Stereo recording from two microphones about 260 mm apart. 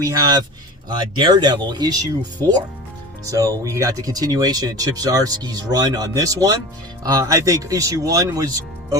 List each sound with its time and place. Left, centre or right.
0.0 s speech: centre
3.2 s speech: centre